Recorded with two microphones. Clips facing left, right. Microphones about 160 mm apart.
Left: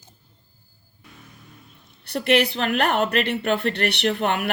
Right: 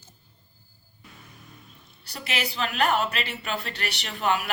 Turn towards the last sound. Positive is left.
turn(degrees=60)  # may be behind; listen again after turning